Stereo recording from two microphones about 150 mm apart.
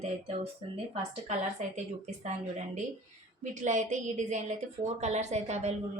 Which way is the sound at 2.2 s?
50° right (ahead or behind).